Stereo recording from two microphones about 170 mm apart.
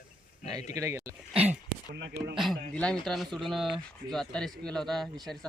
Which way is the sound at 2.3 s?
Centre (ahead or behind).